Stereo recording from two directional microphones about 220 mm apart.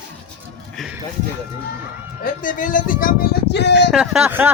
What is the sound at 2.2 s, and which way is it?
Speech, 40° left (ahead or behind).